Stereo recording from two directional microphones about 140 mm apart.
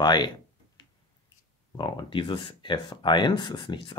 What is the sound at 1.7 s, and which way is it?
Speech, 35° left (ahead or behind).